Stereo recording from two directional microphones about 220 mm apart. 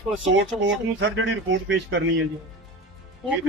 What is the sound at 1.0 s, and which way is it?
Speech, 55° right (ahead or behind).